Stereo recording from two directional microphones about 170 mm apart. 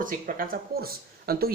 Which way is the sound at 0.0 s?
55° right (ahead or behind).